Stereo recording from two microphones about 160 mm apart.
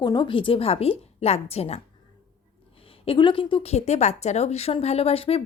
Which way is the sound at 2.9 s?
35° left (ahead or behind).